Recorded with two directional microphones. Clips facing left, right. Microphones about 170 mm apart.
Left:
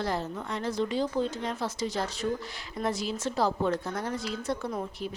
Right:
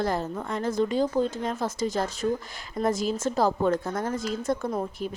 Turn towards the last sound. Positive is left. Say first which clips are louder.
# right 4 dB
turn(degrees=-50)  # may be behind; listen again after turning